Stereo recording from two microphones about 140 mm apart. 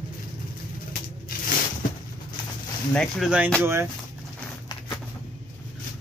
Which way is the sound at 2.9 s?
Centre (ahead or behind).